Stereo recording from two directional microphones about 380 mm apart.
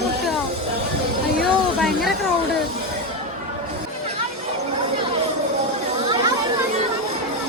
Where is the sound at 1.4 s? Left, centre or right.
Centre.